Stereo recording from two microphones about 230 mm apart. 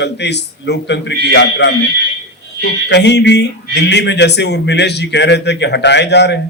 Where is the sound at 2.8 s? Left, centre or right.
Left.